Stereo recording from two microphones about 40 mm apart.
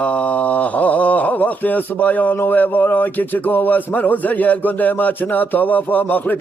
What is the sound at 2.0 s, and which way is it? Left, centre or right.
Speech, left.